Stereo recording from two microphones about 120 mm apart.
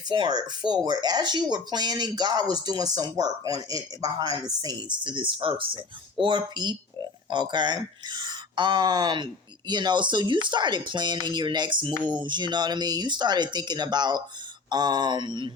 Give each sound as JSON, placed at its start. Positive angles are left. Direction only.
{"t": 0.1, "sound": "speech", "side_deg": -35}